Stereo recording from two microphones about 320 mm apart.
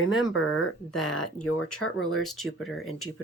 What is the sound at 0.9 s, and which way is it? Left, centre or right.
Speech, left.